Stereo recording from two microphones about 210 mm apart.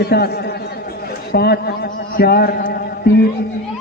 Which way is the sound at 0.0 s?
50° left (ahead or behind).